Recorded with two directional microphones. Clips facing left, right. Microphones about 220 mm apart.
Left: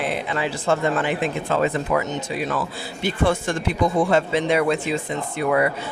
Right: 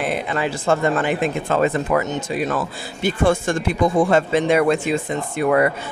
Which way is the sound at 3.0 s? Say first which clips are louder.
Right 3 dB; 50° right (ahead or behind).